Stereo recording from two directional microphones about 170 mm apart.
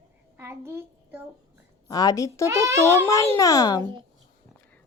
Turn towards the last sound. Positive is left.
turn(degrees=20)  # may be behind; listen again after turning